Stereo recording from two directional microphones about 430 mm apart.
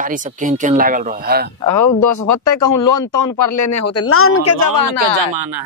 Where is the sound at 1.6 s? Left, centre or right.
Left.